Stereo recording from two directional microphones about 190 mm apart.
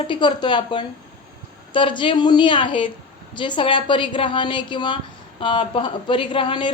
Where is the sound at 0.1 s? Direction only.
25° left (ahead or behind).